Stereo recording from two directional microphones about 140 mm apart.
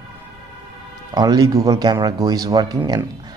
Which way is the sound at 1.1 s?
25° right (ahead or behind).